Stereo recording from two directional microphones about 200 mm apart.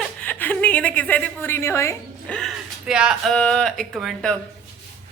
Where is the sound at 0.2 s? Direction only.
10° left (ahead or behind).